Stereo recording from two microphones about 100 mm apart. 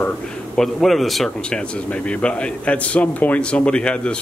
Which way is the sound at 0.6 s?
Centre (ahead or behind).